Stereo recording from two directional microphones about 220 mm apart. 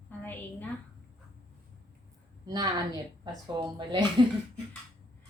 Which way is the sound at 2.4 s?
15° right (ahead or behind).